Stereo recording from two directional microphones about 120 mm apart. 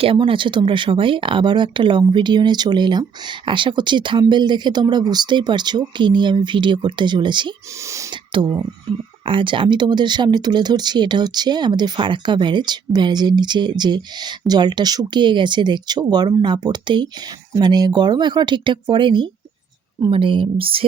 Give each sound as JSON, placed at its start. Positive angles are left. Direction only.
{"t": 0.0, "sound": "speech", "side_deg": -45}